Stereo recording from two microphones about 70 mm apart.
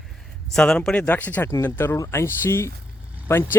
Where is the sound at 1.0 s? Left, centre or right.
Left.